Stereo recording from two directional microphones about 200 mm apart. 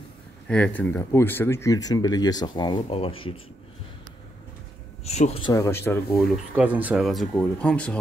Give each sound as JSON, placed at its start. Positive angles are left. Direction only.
{"t": 0.5, "sound": "speech", "side_deg": 5}
{"t": 5.0, "sound": "speech", "side_deg": 30}
{"t": 5.5, "sound": "speech", "side_deg": 15}
{"t": 6.3, "sound": "speech", "side_deg": -5}